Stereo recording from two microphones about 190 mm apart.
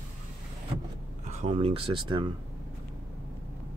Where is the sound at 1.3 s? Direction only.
35° right (ahead or behind).